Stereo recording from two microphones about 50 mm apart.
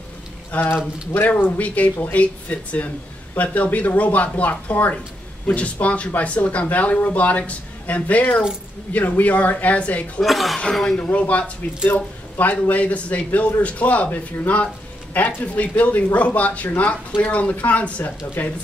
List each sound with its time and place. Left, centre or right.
0.5 s speech: left
10.2 s speech: centre
11.0 s speech: left